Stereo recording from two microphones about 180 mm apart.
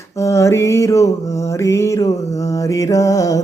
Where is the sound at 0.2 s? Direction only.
15° left (ahead or behind).